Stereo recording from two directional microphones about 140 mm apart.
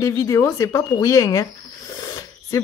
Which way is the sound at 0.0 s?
20° left (ahead or behind).